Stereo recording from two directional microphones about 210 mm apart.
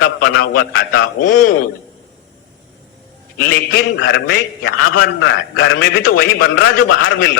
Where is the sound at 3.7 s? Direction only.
60° left (ahead or behind).